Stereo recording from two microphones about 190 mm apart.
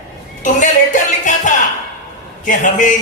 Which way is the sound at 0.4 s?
40° left (ahead or behind).